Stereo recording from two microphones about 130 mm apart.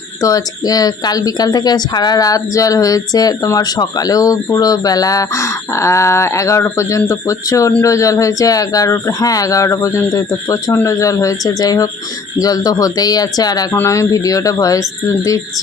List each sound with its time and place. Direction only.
0.2 s speech: 25° left (ahead or behind)